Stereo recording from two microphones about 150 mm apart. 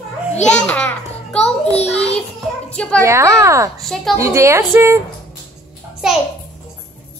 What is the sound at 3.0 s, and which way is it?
Speech, 20° right (ahead or behind).